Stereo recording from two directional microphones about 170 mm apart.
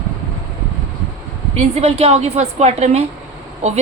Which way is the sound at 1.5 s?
35° right (ahead or behind).